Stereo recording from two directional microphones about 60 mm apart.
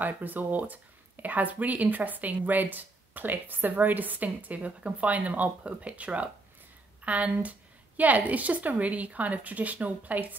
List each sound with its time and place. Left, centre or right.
0.0 s speech: right